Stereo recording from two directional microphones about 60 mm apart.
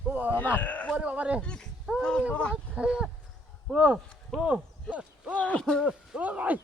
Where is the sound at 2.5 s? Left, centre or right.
Centre.